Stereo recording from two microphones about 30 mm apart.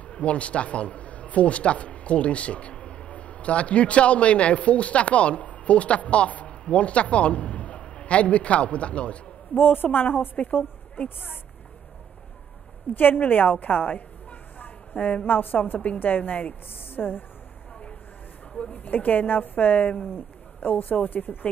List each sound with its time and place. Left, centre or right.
0.1 s a man's voice: left
9.9 s a woman's voice: left
12.9 s a woman's voice: left
14.6 s dog: left
15.2 s a woman's voice: left
17.0 s speech: centre
18.7 s a woman's voice: left